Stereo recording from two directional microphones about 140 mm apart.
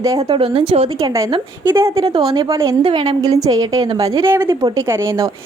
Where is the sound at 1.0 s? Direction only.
25° right (ahead or behind).